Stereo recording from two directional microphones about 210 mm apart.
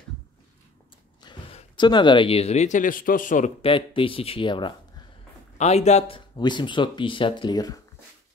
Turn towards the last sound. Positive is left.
turn(degrees=20)  # may be behind; listen again after turning